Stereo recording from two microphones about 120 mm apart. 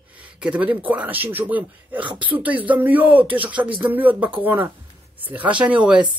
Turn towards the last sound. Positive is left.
turn(degrees=-10)  # may be behind; listen again after turning